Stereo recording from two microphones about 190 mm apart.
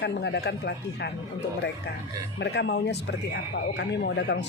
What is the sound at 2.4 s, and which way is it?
Speech, 65° left (ahead or behind).